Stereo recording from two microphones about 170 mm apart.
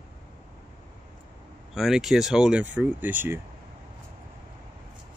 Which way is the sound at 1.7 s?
Centre (ahead or behind).